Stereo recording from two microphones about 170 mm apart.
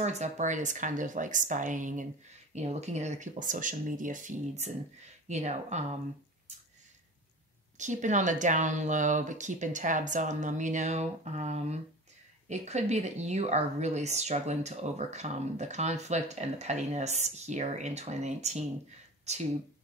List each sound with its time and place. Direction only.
0.0 s speech: 45° right (ahead or behind)
7.7 s speech: 45° right (ahead or behind)